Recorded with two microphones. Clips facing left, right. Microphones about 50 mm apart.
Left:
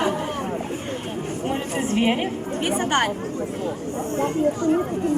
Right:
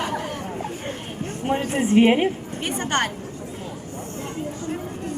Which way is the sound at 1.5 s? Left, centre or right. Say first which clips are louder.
Right 5 dB; centre.